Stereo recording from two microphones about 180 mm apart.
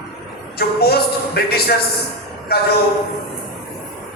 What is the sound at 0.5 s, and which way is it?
A man's voice, 60° left (ahead or behind).